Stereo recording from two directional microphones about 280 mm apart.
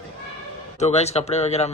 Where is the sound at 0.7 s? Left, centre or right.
Left.